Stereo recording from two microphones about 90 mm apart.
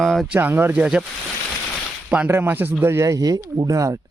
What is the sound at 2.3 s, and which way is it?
Speech, 25° right (ahead or behind).